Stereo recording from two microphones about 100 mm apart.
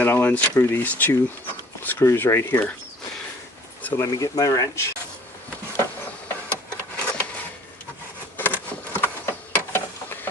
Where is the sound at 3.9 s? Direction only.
35° left (ahead or behind).